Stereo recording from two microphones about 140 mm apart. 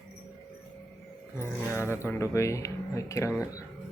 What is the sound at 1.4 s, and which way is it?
Speech, 15° left (ahead or behind).